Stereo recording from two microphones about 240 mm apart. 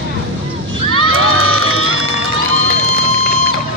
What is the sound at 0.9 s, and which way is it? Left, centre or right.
Crowd, right.